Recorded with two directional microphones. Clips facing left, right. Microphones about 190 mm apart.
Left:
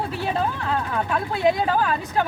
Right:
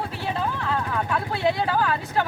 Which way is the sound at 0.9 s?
15° left (ahead or behind).